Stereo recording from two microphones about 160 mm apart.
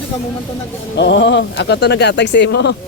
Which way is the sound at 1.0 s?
90° left.